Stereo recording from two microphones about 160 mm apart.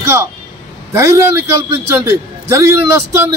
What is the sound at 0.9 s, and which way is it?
A man's voice, 15° right (ahead or behind).